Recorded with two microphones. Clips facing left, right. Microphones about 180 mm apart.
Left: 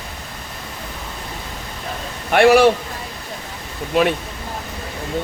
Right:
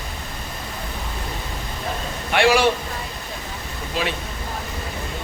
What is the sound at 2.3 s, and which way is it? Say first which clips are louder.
Speech: left 6 dB; 60° left (ahead or behind).